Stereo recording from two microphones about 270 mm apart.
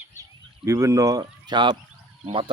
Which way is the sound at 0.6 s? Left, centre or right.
Centre.